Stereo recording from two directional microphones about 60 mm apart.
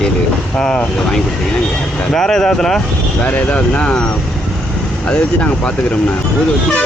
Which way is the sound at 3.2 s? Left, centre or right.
Left.